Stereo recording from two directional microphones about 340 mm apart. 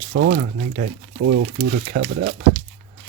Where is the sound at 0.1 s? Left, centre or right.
Right.